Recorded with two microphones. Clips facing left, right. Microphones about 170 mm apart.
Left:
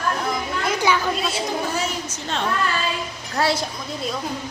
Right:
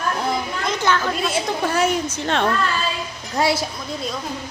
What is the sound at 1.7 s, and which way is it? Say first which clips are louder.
Speech: right 6 dB; 60° right (ahead or behind).